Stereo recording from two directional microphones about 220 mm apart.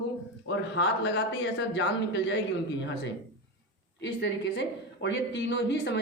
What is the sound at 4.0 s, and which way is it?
A man's voice, 50° left (ahead or behind).